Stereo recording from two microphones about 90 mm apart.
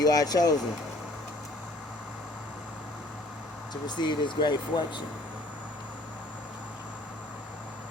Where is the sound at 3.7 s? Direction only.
60° left (ahead or behind).